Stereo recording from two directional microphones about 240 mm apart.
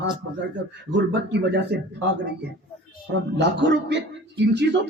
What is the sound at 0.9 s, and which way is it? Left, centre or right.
Speech, right.